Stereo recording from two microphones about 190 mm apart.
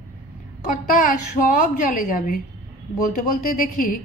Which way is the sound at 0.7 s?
45° left (ahead or behind).